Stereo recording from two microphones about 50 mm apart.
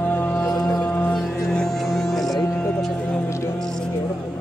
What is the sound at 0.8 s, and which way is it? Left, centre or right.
Music, left.